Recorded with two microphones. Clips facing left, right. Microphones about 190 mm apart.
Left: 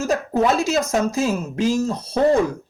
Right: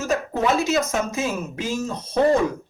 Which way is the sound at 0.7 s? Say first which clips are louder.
Left 2 dB; 35° left (ahead or behind).